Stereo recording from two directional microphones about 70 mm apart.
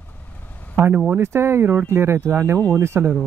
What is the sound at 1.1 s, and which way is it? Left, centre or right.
Speech, right.